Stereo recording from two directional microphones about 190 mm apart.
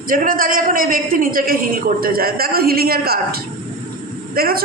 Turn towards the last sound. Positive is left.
turn(degrees=-50)  # may be behind; listen again after turning